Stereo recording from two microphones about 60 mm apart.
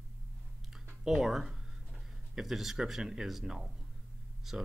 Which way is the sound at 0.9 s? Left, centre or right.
Centre.